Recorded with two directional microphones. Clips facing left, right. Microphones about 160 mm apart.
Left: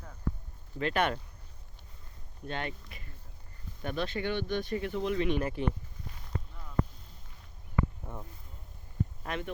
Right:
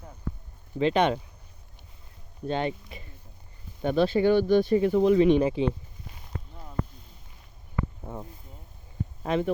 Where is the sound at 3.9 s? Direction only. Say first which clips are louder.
Right 12 dB; 30° right (ahead or behind).